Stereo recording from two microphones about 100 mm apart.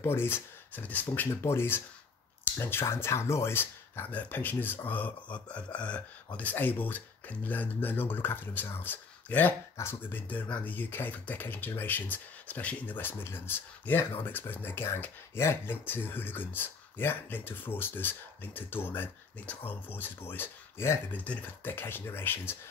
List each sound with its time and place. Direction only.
0.0 s speech: 25° left (ahead or behind)
21.2 s speech: 15° left (ahead or behind)